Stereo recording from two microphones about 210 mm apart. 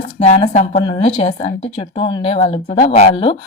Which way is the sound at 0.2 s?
30° left (ahead or behind).